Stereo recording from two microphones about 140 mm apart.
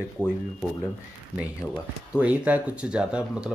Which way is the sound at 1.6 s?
10° left (ahead or behind).